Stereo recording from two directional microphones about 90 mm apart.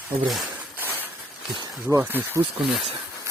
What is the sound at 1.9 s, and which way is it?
Speech, 30° right (ahead or behind).